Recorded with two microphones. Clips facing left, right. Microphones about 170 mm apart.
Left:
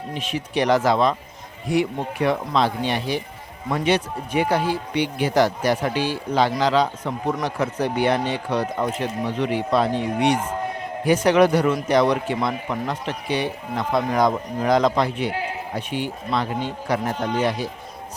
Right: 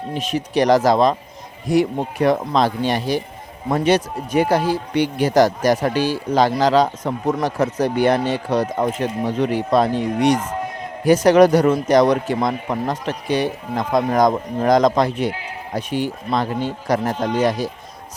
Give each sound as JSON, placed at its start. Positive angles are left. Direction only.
{"t": 0.1, "sound": "a man's voice", "side_deg": -40}